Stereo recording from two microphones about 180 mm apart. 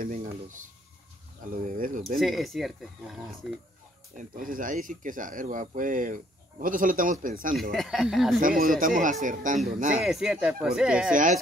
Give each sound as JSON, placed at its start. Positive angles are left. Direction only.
{"t": 0.0, "sound": "a sound", "side_deg": -45}
{"t": 1.4, "sound": "speech", "side_deg": -50}
{"t": 2.1, "sound": "speech", "side_deg": 0}
{"t": 4.2, "sound": "speech", "side_deg": -50}
{"t": 7.7, "sound": "speech", "side_deg": 0}
{"t": 8.4, "sound": "speech", "side_deg": -50}
{"t": 10.0, "sound": "speech", "side_deg": -5}